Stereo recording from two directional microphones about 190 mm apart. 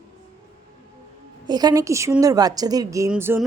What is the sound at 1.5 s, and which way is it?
A woman's voice, 20° right (ahead or behind).